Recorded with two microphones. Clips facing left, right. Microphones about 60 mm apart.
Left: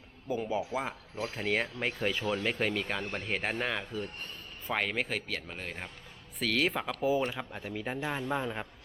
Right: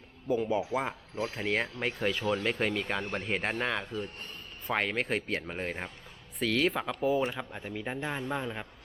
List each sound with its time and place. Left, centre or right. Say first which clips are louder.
0.3 s speech: right 4 dB; centre
0.8 s speech: right 2 dB; centre
1.3 s speech: left 1 dB; centre
5.3 s speech: right 5 dB; right
6.4 s speech: right 2 dB; centre